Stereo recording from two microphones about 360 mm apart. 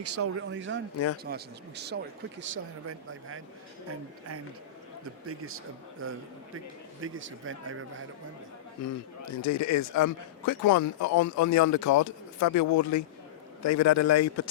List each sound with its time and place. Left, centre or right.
0.0 s speech: right
5.2 s speech: right
8.8 s speech: left